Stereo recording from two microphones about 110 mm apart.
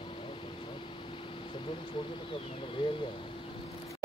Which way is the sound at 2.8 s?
45° left (ahead or behind).